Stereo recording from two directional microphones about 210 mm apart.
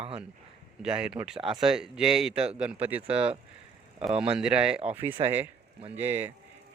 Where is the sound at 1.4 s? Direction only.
25° right (ahead or behind).